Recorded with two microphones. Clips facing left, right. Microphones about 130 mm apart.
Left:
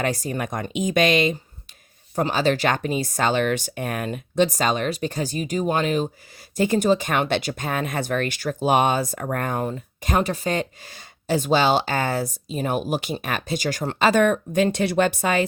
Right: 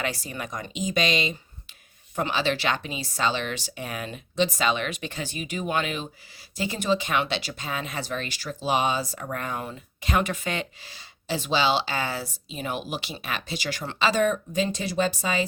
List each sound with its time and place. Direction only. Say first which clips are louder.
0.0 s speech: left 6 dB; 45° left (ahead or behind)
2.1 s speech: left 5 dB; 40° left (ahead or behind); by 15.4 s 60° left (ahead or behind)